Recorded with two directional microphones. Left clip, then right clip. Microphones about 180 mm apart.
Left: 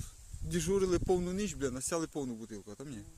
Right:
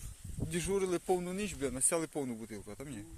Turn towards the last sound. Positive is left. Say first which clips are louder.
# right 1 dB
turn(degrees=25)  # may be behind; listen again after turning